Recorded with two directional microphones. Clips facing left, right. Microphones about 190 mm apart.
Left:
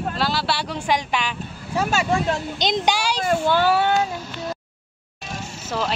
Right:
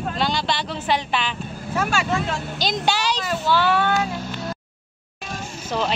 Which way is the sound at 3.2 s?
50° left (ahead or behind).